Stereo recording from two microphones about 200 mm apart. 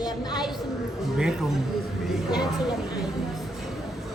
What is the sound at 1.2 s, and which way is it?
Speech, 5° right (ahead or behind).